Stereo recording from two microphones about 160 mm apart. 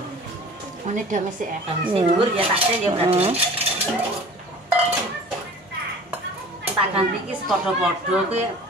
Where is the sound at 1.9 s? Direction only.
35° right (ahead or behind).